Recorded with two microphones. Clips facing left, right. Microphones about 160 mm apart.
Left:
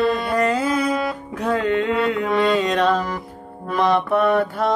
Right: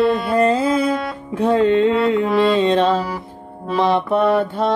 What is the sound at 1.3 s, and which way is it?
Music, 25° right (ahead or behind).